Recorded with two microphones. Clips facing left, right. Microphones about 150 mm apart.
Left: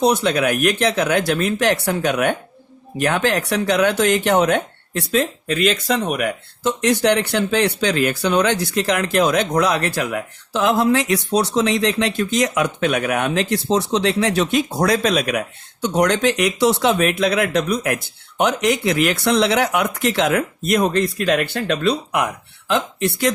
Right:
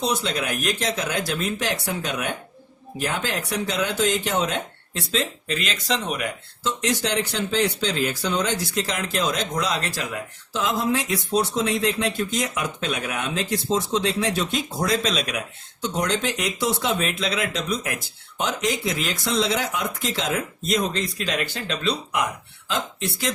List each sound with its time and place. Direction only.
0.0 s speech: 65° left (ahead or behind)